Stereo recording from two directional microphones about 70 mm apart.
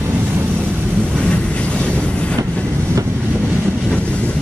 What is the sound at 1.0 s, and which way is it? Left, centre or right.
Waves, centre.